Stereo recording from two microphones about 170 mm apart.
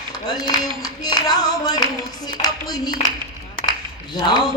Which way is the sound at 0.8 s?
25° left (ahead or behind).